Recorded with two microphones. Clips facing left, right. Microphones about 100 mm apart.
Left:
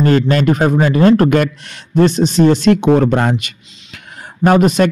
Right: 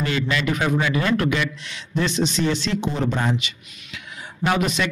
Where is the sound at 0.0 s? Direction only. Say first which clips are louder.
Left 11 dB; 45° left (ahead or behind).